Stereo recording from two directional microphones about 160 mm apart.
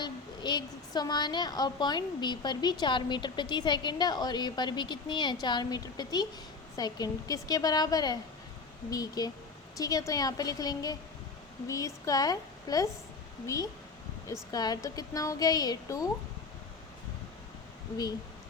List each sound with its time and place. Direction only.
0.0 s a woman's voice: 25° left (ahead or behind)
14.5 s a woman's voice: 25° left (ahead or behind)